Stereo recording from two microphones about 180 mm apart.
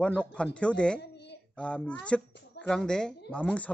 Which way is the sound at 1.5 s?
5° left (ahead or behind).